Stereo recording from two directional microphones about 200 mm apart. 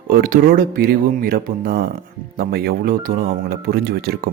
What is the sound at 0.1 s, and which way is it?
Speech, 45° right (ahead or behind).